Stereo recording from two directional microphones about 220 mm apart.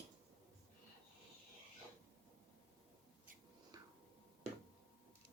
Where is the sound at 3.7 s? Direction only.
15° right (ahead or behind).